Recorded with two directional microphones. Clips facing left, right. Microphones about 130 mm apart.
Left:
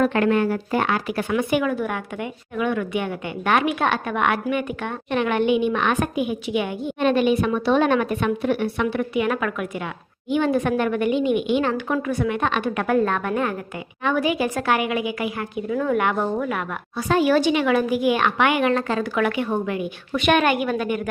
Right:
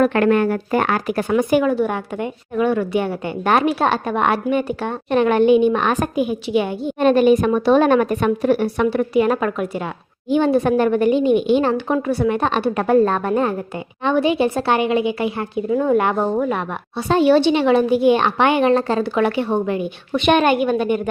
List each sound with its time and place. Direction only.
0.0 s a woman's voice: 55° right (ahead or behind); by 21.1 s 30° right (ahead or behind)